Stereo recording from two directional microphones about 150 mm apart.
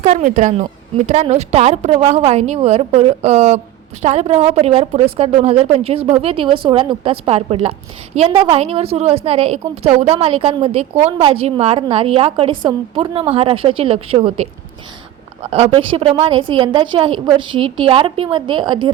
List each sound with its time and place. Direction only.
0.0 s a woman's voice: 55° right (ahead or behind)
15.4 s a woman's voice: 45° right (ahead or behind)